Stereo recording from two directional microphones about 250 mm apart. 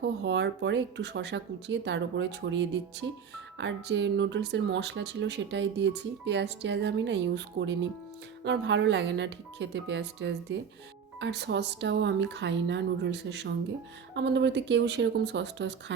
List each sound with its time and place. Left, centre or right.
0.0 s speech: right